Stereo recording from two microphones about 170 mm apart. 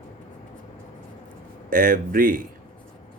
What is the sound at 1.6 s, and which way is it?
Speech, 55° right (ahead or behind).